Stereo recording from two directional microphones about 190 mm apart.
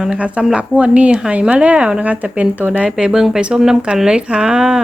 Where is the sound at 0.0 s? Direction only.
5° right (ahead or behind).